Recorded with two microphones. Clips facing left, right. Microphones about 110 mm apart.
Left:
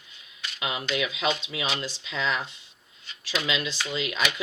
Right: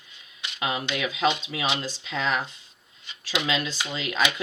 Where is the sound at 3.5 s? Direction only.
40° right (ahead or behind).